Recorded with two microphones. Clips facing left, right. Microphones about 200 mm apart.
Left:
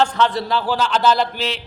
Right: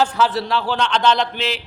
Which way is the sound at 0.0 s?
5° right (ahead or behind).